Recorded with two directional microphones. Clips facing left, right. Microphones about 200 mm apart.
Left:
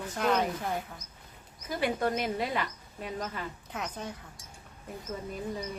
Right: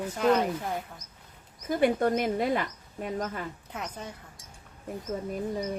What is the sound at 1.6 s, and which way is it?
Speech, 50° right (ahead or behind).